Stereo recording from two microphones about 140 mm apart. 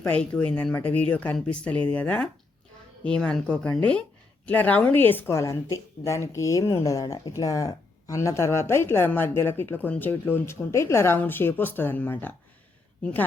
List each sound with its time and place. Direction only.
0.0 s a woman's voice: 10° left (ahead or behind)